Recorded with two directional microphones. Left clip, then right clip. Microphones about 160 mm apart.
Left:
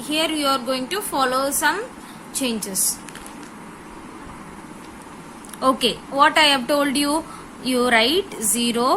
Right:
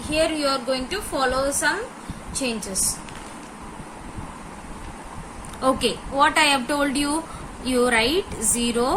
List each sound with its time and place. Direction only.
0.1 s a woman's voice: 55° left (ahead or behind)
5.5 s speech: 30° left (ahead or behind)